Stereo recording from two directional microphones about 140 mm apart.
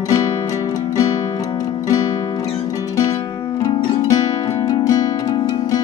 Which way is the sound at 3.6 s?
25° left (ahead or behind).